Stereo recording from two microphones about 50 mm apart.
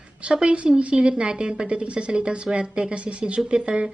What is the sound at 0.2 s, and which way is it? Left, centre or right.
A woman's voice, right.